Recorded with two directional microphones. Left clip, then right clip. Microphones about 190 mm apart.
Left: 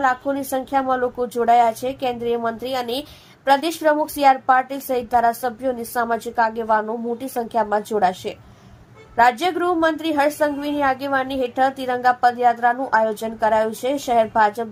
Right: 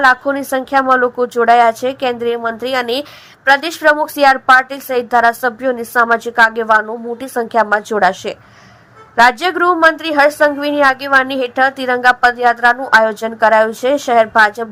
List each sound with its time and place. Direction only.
0.0 s a woman's voice: 15° right (ahead or behind)